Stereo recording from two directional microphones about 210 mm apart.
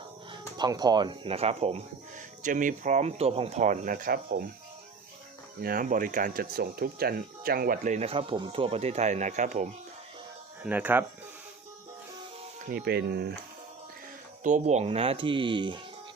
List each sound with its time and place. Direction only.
0.5 s speech: 20° right (ahead or behind); by 4.4 s 45° right (ahead or behind)
5.6 s speech: 40° right (ahead or behind)
10.6 s speech: 10° right (ahead or behind)
12.6 s speech: 45° right (ahead or behind)
14.4 s speech: 35° right (ahead or behind)